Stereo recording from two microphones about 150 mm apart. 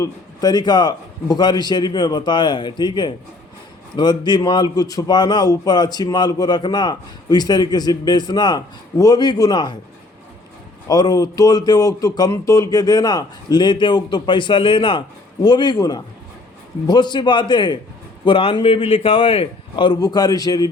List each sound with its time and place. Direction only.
0.0 s a man's voice: 25° left (ahead or behind)
10.8 s a man's voice: 25° left (ahead or behind)